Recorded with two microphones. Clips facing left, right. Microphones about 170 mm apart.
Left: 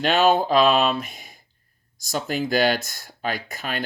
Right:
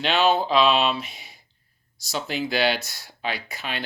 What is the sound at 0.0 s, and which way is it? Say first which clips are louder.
Speech: left 3 dB; 45° left (ahead or behind).